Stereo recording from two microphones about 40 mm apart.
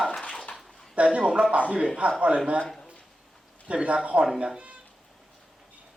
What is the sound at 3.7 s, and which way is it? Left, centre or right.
Speech, right.